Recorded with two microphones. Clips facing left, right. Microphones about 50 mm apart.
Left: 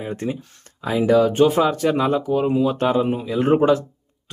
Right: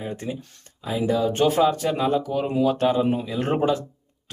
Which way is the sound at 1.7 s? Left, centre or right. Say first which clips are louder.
Left 3 dB; left.